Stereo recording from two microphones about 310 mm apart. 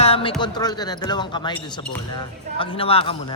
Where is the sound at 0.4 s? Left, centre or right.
Centre.